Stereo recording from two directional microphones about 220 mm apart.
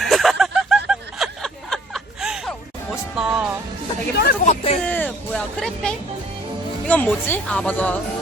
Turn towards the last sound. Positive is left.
turn(degrees=5)  # may be behind; listen again after turning